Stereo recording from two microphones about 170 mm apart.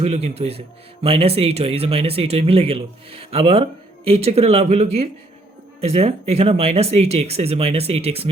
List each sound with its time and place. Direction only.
0.0 s speech: 40° right (ahead or behind)